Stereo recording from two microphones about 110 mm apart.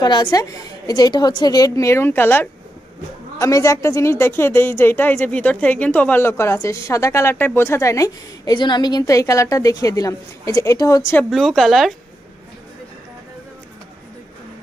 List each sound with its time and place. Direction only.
0.0 s a woman's voice: 40° left (ahead or behind); by 2.5 s 20° left (ahead or behind)
3.3 s a woman's voice: 30° left (ahead or behind)
8.5 s a woman's voice: 45° left (ahead or behind)
11.2 s a woman's voice: centre (ahead or behind)